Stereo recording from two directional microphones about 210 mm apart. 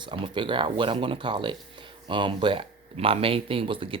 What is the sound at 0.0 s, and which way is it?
Speech, 25° right (ahead or behind).